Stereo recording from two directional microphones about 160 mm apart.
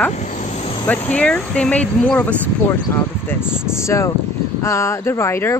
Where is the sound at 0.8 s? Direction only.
10° left (ahead or behind).